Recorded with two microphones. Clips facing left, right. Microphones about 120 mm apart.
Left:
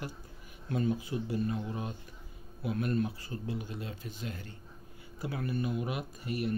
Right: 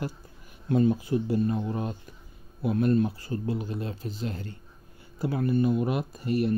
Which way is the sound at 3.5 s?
50° right (ahead or behind).